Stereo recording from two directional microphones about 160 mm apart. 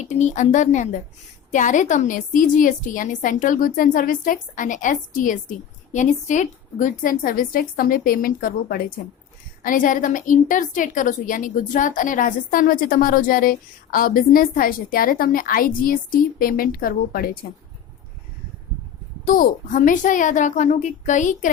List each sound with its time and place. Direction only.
0.0 s a woman's voice: 45° left (ahead or behind); by 17.3 s 65° left (ahead or behind)
19.2 s a woman's voice: 60° left (ahead or behind)